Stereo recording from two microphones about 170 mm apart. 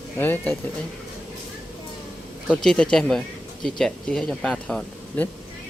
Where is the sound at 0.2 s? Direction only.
10° left (ahead or behind).